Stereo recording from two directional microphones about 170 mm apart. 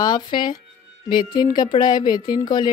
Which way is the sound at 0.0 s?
25° left (ahead or behind).